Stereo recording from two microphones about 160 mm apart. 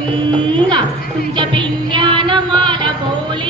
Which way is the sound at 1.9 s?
30° right (ahead or behind).